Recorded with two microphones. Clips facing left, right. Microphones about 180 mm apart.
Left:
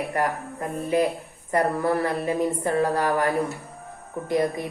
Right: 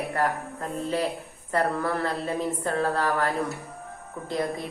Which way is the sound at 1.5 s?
15° left (ahead or behind).